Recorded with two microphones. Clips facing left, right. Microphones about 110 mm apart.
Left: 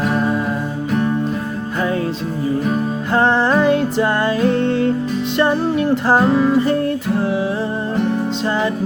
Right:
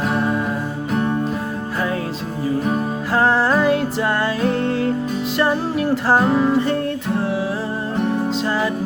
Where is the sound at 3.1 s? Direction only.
5° right (ahead or behind).